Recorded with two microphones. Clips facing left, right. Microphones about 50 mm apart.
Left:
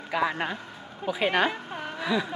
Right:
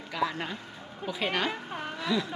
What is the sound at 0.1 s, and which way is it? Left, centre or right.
Speech, left.